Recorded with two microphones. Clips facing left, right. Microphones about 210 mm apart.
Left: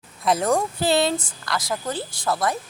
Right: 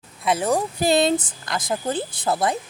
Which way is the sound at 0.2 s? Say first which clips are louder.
Left 1 dB; centre (ahead or behind).